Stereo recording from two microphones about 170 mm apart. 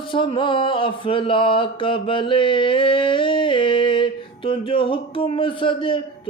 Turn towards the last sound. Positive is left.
turn(degrees=30)  # may be behind; listen again after turning